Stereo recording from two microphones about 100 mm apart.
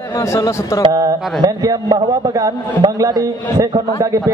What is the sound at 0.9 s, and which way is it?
A man's voice, 40° right (ahead or behind).